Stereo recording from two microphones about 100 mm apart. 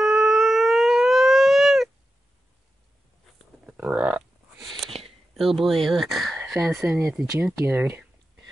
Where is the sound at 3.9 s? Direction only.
15° right (ahead or behind).